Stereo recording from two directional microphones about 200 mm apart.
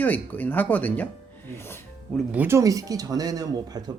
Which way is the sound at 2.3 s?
10° right (ahead or behind).